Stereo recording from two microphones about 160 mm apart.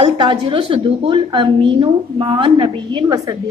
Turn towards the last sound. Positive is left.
turn(degrees=-25)  # may be behind; listen again after turning